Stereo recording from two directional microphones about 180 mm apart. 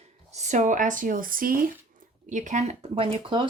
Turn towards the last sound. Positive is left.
turn(degrees=-25)  # may be behind; listen again after turning